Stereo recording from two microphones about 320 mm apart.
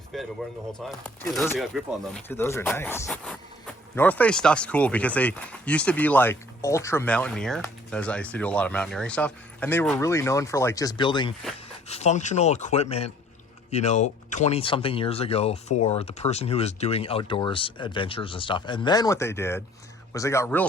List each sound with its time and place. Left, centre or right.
0.1 s speech: centre